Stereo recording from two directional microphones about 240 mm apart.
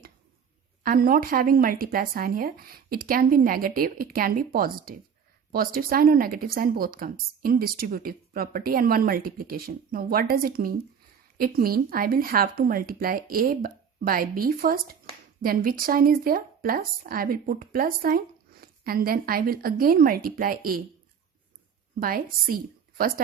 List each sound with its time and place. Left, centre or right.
0.8 s speech: right
22.0 s speech: right